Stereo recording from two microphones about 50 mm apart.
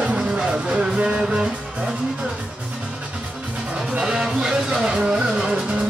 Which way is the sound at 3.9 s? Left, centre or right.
Centre.